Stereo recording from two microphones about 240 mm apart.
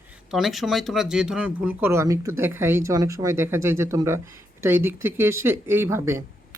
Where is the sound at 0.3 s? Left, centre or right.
Centre.